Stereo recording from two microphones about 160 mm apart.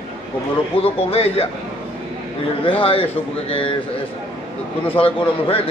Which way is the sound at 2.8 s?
35° left (ahead or behind).